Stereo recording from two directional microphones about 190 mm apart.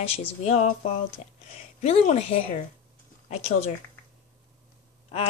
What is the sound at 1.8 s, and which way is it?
Speech, 35° left (ahead or behind).